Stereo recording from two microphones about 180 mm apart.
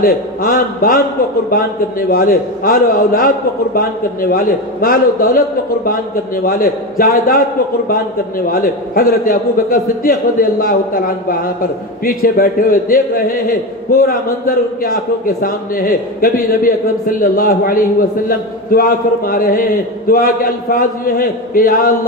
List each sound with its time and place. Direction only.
0.0 s a man's voice: 55° left (ahead or behind)
6.4 s a man's voice: 55° left (ahead or behind)
8.5 s a man's voice: 55° left (ahead or behind)